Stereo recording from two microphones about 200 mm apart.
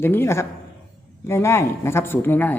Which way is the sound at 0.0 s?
10° left (ahead or behind).